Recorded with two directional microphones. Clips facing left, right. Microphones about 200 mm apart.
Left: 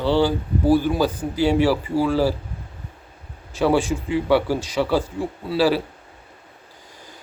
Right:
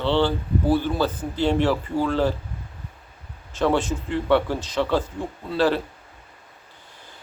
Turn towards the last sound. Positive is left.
turn(degrees=10)  # may be behind; listen again after turning